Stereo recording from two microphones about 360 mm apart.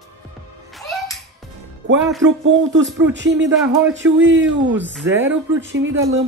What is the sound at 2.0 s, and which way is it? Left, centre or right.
Speech, centre.